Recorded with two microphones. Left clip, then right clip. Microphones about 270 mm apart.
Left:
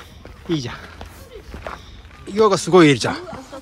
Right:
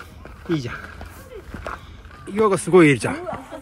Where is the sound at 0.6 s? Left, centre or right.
Centre.